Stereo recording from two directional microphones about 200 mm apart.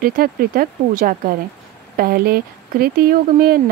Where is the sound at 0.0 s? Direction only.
45° right (ahead or behind).